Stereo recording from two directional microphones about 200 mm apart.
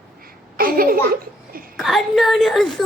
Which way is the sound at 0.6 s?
45° right (ahead or behind).